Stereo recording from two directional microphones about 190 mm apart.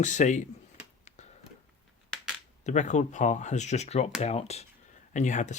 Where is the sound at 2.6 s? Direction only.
40° left (ahead or behind).